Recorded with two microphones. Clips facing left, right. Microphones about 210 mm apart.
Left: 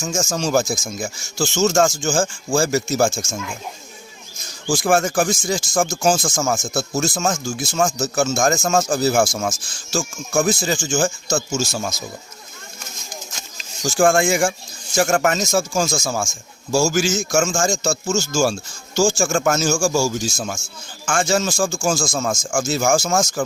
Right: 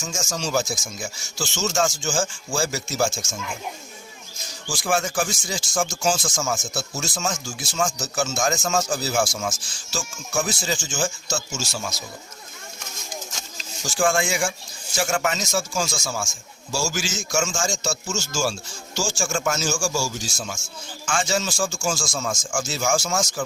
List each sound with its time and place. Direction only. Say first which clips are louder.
0.0 s speech: left 7 dB; 45° left (ahead or behind)
4.7 s speech: left 7 dB; 50° left (ahead or behind)
13.8 s speech: left 6 dB; 45° left (ahead or behind)